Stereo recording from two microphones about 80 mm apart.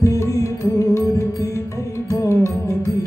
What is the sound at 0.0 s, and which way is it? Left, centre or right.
Music, left.